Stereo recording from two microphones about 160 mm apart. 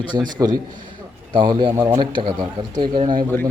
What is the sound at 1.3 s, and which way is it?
Speech, 30° right (ahead or behind).